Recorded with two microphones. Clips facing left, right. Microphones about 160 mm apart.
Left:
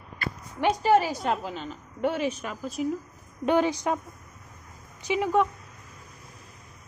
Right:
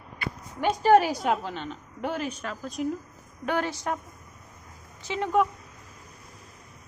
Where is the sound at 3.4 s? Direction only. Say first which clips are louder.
Left 5 dB; 15° left (ahead or behind).